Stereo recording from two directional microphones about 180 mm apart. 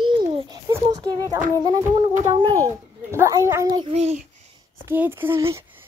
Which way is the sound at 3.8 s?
35° right (ahead or behind).